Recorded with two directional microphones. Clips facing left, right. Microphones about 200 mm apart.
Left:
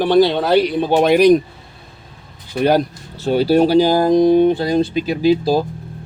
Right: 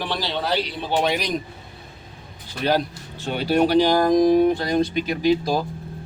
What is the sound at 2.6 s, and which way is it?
Speech, 50° left (ahead or behind).